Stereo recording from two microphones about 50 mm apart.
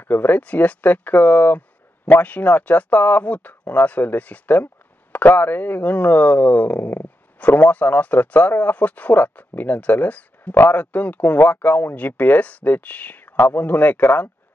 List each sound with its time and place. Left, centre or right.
0.0 s speech: left